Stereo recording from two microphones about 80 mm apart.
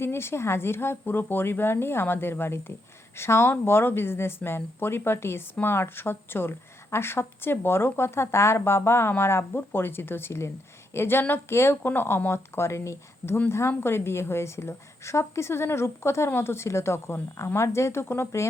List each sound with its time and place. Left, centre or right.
0.0 s a woman's voice: left